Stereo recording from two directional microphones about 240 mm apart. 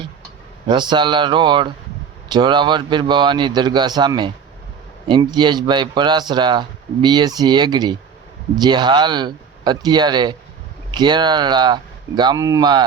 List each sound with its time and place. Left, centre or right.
0.7 s speech: centre